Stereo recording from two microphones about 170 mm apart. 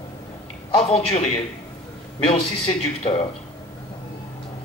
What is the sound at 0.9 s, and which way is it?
Speech, 35° left (ahead or behind).